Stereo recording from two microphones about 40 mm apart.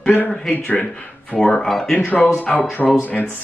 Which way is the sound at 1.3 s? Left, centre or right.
Left.